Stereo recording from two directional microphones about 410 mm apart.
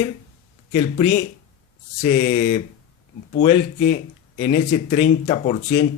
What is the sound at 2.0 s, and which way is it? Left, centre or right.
Speech, centre.